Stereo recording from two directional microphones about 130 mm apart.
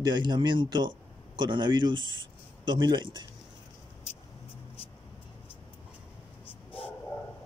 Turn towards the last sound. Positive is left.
turn(degrees=45)  # may be behind; listen again after turning